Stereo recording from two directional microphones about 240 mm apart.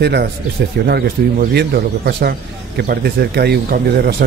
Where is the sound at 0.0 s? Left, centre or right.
Right.